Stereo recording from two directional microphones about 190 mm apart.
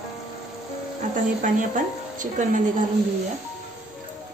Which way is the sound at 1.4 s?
40° right (ahead or behind).